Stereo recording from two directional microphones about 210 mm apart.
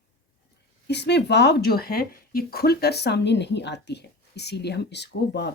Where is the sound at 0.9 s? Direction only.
55° left (ahead or behind).